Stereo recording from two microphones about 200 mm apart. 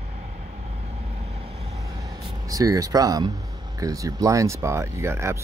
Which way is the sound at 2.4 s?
15° right (ahead or behind).